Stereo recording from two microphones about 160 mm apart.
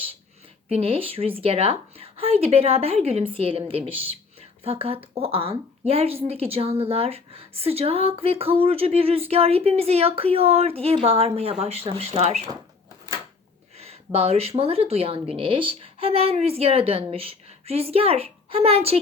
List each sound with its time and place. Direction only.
0.7 s a woman's voice: 35° right (ahead or behind)
13.7 s a woman's voice: 40° right (ahead or behind)